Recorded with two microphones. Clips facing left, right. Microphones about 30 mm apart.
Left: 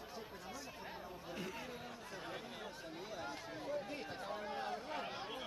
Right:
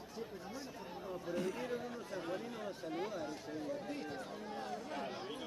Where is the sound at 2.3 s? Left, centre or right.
Centre.